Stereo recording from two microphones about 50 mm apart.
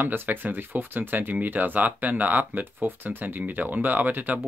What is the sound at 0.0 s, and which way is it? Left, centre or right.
Speech, right.